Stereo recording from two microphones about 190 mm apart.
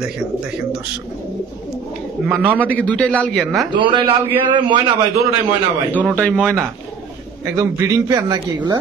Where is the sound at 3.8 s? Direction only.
25° right (ahead or behind).